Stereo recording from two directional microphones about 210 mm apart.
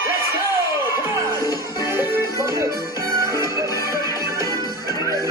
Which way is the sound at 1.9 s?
15° right (ahead or behind).